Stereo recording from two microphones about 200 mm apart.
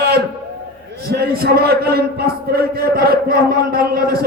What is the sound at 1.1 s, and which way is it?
Crowd, 50° right (ahead or behind).